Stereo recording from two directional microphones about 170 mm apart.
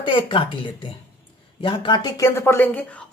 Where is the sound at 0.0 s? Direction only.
30° left (ahead or behind).